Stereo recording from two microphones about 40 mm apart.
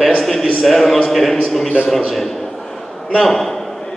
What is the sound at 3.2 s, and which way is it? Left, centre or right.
Speech, centre.